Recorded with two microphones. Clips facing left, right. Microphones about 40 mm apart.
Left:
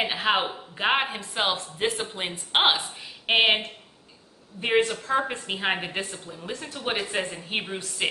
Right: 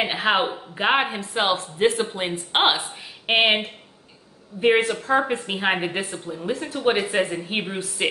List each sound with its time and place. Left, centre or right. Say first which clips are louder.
0.0 s speech: right 3 dB; centre
6.1 s speech: right 8 dB; right